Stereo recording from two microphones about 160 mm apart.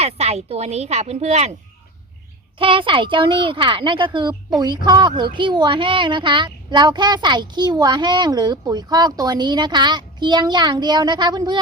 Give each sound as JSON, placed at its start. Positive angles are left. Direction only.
{"t": 0.0, "sound": "a woman's voice", "side_deg": -40}
{"t": 2.6, "sound": "speech", "side_deg": -35}